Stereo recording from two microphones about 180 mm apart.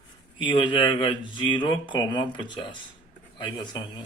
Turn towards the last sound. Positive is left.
turn(degrees=25)  # may be behind; listen again after turning